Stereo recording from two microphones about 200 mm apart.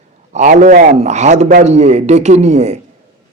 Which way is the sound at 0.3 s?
40° right (ahead or behind).